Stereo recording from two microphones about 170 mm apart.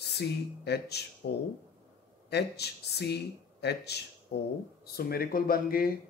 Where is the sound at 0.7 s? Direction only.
75° left (ahead or behind).